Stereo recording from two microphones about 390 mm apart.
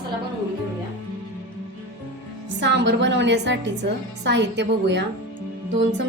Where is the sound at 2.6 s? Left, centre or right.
Right.